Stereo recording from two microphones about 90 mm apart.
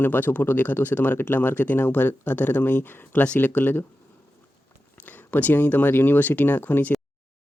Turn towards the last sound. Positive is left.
turn(degrees=20)  # may be behind; listen again after turning